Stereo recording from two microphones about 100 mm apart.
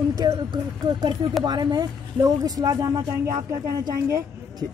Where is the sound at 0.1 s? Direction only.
45° right (ahead or behind).